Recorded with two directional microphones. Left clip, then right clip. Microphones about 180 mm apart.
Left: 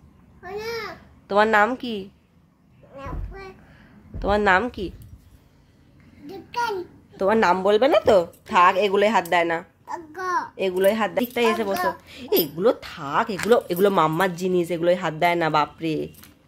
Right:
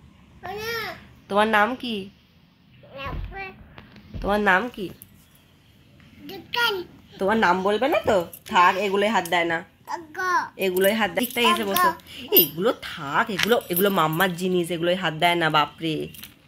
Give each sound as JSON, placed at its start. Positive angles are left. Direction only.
{"t": 0.6, "sound": "a child's voice", "side_deg": 10}
{"t": 4.2, "sound": "speech", "side_deg": 10}
{"t": 6.2, "sound": "a sound", "side_deg": 5}
{"t": 7.5, "sound": "a woman's voice", "side_deg": 25}
{"t": 11.7, "sound": "a woman's voice", "side_deg": 25}
{"t": 12.1, "sound": "speech", "side_deg": 15}